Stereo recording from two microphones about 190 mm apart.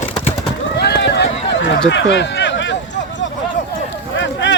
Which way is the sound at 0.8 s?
60° left (ahead or behind).